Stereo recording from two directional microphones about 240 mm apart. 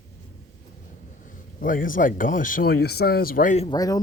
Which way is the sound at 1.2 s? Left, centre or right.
Left.